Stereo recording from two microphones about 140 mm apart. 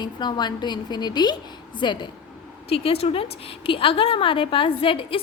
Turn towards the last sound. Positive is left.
turn(degrees=40)  # may be behind; listen again after turning